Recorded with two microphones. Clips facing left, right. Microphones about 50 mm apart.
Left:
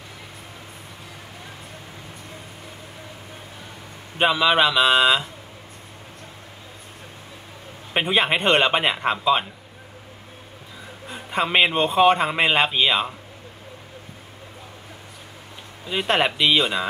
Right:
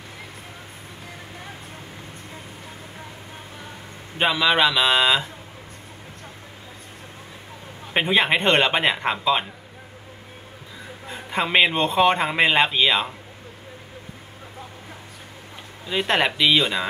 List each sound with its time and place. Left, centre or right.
4.2 s speech: centre
7.9 s speech: centre
11.1 s speech: centre
15.9 s speech: centre